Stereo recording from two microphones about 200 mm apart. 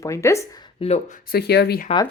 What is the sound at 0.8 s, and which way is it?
Speech, 30° left (ahead or behind).